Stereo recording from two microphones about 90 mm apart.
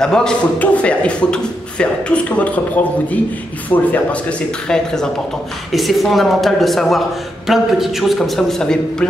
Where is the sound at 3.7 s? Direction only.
25° left (ahead or behind).